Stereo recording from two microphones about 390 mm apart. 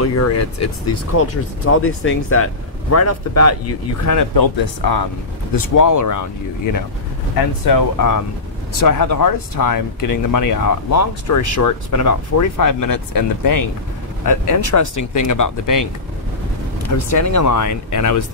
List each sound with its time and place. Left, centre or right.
0.0 s speech: left
4.4 s speech: left
5.6 s speech: left
17.2 s speech: left